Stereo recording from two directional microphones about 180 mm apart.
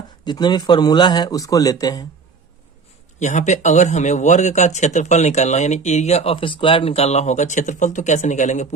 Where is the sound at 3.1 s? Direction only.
40° left (ahead or behind).